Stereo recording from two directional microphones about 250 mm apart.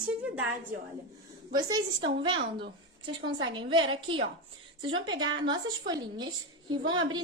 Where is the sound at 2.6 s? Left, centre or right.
Right.